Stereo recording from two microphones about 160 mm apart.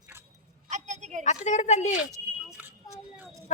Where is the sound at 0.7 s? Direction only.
45° right (ahead or behind).